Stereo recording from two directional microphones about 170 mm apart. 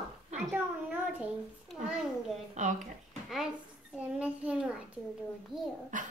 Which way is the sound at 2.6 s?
45° right (ahead or behind).